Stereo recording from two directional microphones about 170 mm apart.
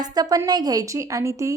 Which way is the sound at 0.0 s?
20° right (ahead or behind).